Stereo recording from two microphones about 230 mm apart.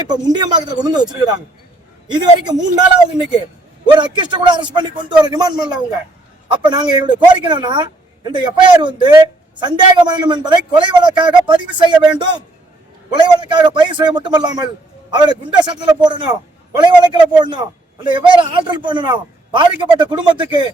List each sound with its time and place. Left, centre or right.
0.1 s a man's voice: centre